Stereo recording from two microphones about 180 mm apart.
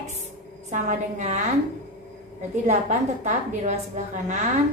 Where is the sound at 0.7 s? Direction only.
40° right (ahead or behind).